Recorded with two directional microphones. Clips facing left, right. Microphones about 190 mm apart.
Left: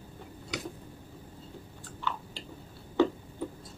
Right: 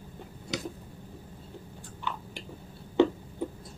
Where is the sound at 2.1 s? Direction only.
15° right (ahead or behind).